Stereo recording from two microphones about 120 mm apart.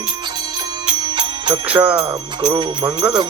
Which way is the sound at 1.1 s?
45° right (ahead or behind).